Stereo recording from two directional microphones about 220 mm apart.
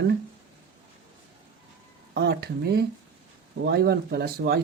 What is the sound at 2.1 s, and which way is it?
Speech, 50° right (ahead or behind).